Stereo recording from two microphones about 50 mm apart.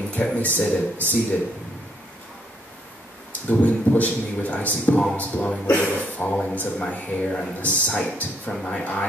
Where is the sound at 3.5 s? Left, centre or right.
Left.